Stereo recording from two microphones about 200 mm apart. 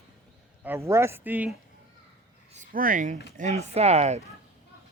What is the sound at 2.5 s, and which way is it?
Speech, 40° right (ahead or behind).